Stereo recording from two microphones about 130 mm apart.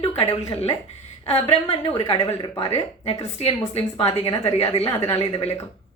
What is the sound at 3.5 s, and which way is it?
A woman's voice, 50° left (ahead or behind).